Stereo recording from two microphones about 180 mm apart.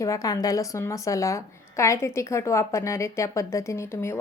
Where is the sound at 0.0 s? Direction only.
20° left (ahead or behind).